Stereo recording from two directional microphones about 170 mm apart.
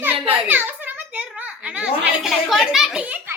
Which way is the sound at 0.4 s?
10° right (ahead or behind).